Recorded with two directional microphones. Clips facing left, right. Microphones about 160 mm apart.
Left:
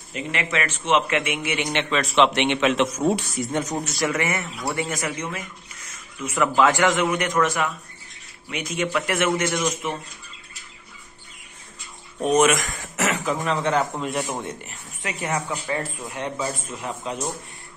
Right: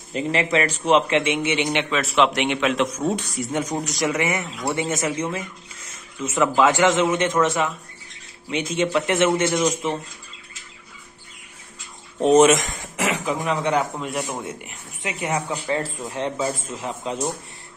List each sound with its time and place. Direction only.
0.1 s a man's voice: 30° right (ahead or behind); by 2.9 s centre (ahead or behind)
3.0 s speech: 10° left (ahead or behind)
3.3 s a man's voice: 5° right (ahead or behind); by 9.7 s 25° right (ahead or behind)
12.2 s a man's voice: 25° right (ahead or behind)
12.7 s speech: 15° right (ahead or behind)
13.9 s speech: centre (ahead or behind); by 15.4 s 20° right (ahead or behind)
15.6 s a man's voice: 30° right (ahead or behind)